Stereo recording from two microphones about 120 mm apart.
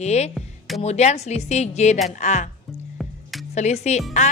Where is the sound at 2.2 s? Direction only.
90° left.